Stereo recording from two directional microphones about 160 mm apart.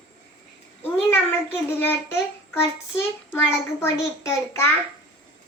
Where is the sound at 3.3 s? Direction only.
15° left (ahead or behind).